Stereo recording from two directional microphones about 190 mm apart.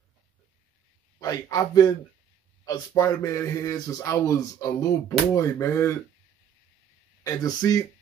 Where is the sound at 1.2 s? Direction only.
20° left (ahead or behind).